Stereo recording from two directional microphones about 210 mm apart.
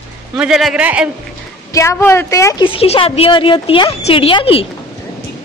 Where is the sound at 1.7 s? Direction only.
15° left (ahead or behind).